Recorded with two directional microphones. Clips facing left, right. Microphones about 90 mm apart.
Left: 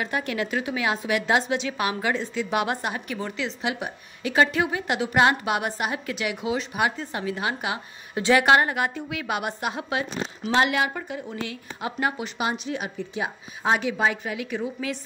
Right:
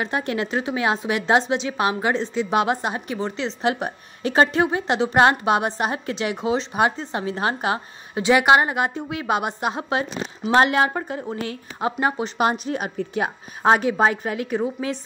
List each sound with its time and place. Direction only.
0.0 s a woman's voice: 30° right (ahead or behind)
8.1 s a woman's voice: 20° right (ahead or behind)
12.4 s a woman's voice: 45° right (ahead or behind)